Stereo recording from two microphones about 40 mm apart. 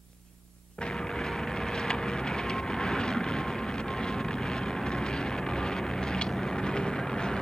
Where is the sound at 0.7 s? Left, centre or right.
Left.